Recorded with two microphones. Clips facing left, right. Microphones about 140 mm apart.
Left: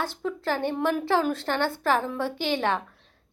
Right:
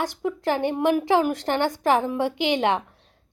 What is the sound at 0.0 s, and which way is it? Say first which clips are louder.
A woman's voice: right 4 dB; 15° right (ahead or behind).